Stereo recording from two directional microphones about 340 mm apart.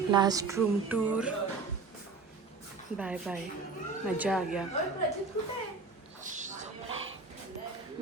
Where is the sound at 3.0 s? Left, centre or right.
Centre.